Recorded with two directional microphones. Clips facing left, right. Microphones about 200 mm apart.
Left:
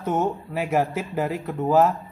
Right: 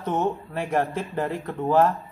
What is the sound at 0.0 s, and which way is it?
Speech, 10° left (ahead or behind).